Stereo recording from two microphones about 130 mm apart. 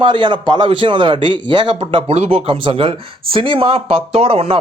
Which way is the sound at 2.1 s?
55° right (ahead or behind).